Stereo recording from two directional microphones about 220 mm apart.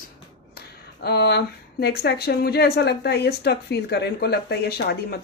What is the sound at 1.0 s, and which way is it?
Speech, 45° left (ahead or behind).